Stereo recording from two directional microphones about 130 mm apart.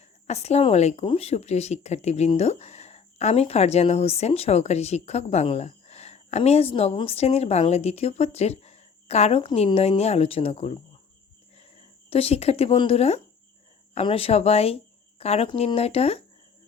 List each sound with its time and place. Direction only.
0.3 s speech: 55° left (ahead or behind); by 9.7 s 40° left (ahead or behind)
9.7 s speech: 50° left (ahead or behind)
11.5 s a sound: 50° left (ahead or behind)
12.8 s speech: 50° left (ahead or behind)